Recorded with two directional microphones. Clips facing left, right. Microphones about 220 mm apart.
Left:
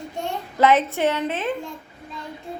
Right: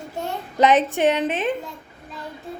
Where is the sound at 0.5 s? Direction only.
15° right (ahead or behind).